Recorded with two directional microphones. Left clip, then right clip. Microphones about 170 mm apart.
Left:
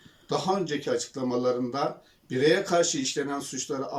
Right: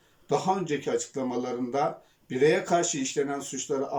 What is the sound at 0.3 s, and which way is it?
Speech, 15° right (ahead or behind).